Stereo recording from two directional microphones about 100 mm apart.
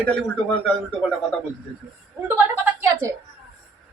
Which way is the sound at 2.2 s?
20° right (ahead or behind).